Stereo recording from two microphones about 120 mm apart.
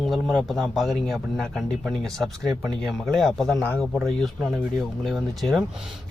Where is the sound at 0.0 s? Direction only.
Centre (ahead or behind).